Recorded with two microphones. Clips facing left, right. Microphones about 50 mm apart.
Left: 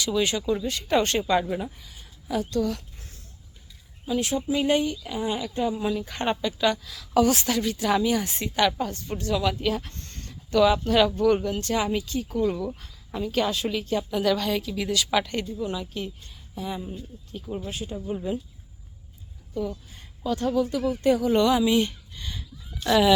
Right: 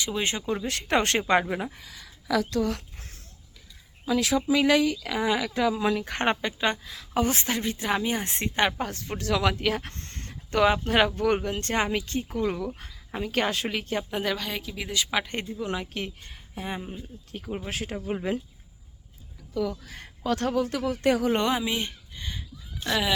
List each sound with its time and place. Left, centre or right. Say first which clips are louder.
0.0 s a woman's voice: left 4 dB; right
0.6 s speech: right 2 dB; right
2.6 s a sound: left 1 dB; right
4.0 s speech: right 2 dB; right
6.6 s a woman's voice: left 3 dB; right
8.8 s a woman's voice: left 2 dB; right
14.3 s a woman's voice: left 6 dB; centre
15.5 s speech: left 1 dB; right
17.7 s speech: right 2 dB; right
19.8 s speech: even; right
21.6 s a sound: left 8 dB; centre
22.8 s speech: left 6 dB; right